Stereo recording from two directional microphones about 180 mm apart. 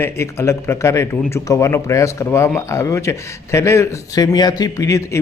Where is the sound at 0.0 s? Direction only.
15° left (ahead or behind).